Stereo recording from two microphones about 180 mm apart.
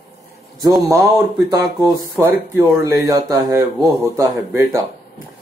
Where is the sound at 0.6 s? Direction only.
20° right (ahead or behind).